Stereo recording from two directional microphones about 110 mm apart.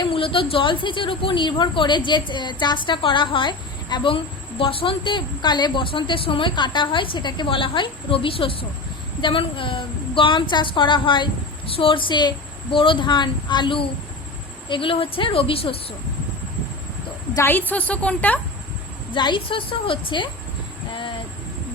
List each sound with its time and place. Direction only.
0.0 s a woman's voice: 55° left (ahead or behind)
17.4 s a woman's voice: 15° left (ahead or behind)
19.1 s a woman's voice: 45° left (ahead or behind)